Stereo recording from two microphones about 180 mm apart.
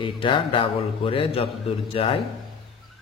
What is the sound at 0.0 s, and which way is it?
A man's voice, 30° left (ahead or behind).